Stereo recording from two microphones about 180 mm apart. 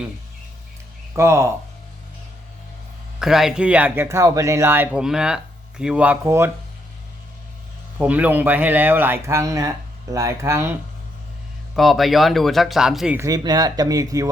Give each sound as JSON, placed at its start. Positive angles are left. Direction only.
{"t": 1.1, "sound": "speech", "side_deg": -15}
{"t": 3.2, "sound": "speech", "side_deg": 0}
{"t": 7.9, "sound": "speech", "side_deg": -10}
{"t": 11.8, "sound": "speech", "side_deg": 0}
{"t": 13.1, "sound": "speech", "side_deg": -20}